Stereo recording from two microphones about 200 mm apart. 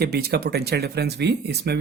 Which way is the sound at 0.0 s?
50° right (ahead or behind).